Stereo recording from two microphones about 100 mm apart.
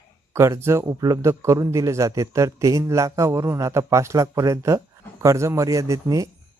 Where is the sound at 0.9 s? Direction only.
40° right (ahead or behind).